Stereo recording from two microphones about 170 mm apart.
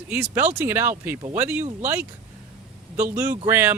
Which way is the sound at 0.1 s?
10° right (ahead or behind).